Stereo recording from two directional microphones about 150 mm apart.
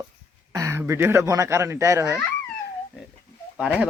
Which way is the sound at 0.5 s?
20° right (ahead or behind).